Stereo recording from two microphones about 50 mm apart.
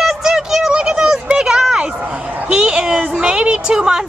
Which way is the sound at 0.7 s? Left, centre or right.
Centre.